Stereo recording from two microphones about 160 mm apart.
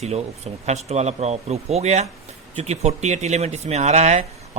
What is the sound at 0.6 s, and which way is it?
Speech, 45° right (ahead or behind).